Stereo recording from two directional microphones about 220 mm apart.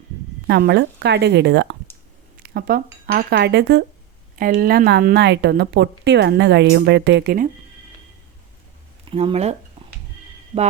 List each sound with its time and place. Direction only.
0.4 s a woman's voice: 50° right (ahead or behind)
9.0 s speech: 25° right (ahead or behind)